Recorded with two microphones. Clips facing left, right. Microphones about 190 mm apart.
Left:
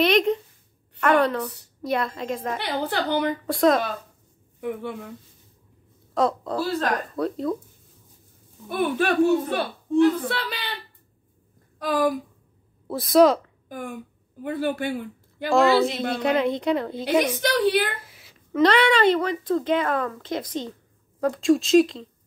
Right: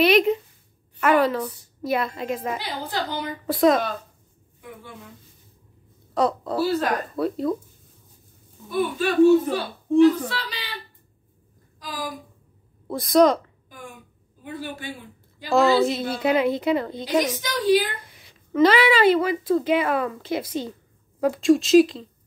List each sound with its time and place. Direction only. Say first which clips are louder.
0.0 s a sound: right 2 dB; 5° right (ahead or behind)
1.0 s a woman's voice: right 1 dB; 5° right (ahead or behind)
2.6 s speech: left 3 dB; 65° left (ahead or behind)
3.4 s a woman's voice: right 3 dB; centre (ahead or behind)
4.6 s a woman's voice: left 12 dB; 65° left (ahead or behind)
6.1 s a woman's voice: right 1 dB; centre (ahead or behind)
8.6 s speech: left 1 dB; 65° left (ahead or behind)
11.8 s a sound: left 11 dB; 60° left (ahead or behind)
12.8 s a woman's voice: left 1 dB; centre (ahead or behind)
13.7 s speech: left 10 dB; 55° left (ahead or behind)
15.5 s a woman's voice: even; centre (ahead or behind)
17.2 s speech: left 4 dB; 60° left (ahead or behind)
18.0 s a woman's voice: even; 5° left (ahead or behind)